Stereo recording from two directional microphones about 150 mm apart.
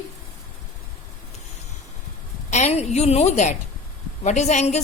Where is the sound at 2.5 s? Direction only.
50° left (ahead or behind).